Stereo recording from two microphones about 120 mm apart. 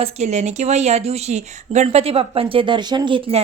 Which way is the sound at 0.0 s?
70° right (ahead or behind).